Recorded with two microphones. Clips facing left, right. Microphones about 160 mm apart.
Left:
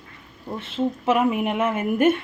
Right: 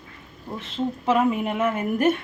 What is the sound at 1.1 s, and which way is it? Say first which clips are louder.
Speech: even; 10° left (ahead or behind).